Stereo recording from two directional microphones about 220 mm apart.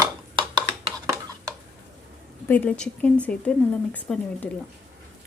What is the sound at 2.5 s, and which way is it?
A woman's voice, 5° left (ahead or behind).